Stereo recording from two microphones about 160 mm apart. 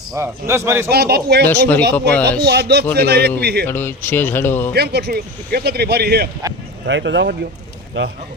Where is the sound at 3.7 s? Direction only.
15° left (ahead or behind).